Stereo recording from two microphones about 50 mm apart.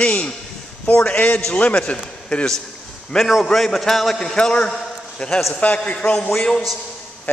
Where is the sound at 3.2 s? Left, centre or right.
Centre.